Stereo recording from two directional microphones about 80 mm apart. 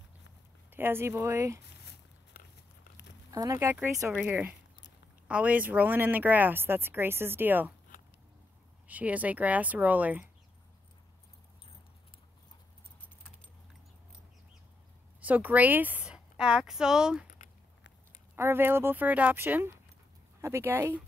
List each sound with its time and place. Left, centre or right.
0.7 s speech: right
3.3 s a sound: right
4.3 s speech: right
8.8 s speech: centre
15.1 s a woman's voice: centre
18.3 s speech: right